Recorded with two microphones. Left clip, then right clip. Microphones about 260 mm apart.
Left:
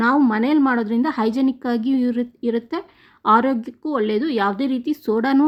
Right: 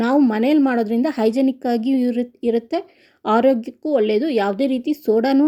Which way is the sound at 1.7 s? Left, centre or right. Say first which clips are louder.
Right 2 dB; left.